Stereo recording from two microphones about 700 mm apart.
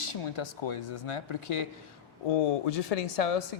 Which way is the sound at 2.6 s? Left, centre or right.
Left.